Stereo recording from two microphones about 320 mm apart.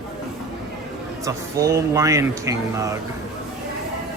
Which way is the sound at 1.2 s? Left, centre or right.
Centre.